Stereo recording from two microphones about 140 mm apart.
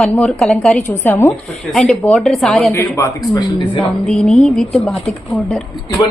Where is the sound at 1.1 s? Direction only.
15° left (ahead or behind).